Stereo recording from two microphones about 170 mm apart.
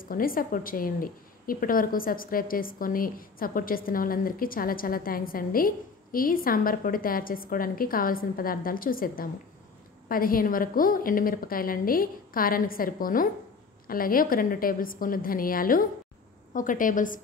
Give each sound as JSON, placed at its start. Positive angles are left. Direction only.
{"t": 0.0, "sound": "a woman's voice", "side_deg": 55}